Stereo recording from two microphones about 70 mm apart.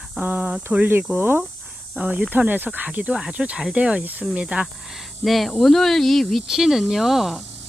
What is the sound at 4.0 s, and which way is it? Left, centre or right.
Speech, right.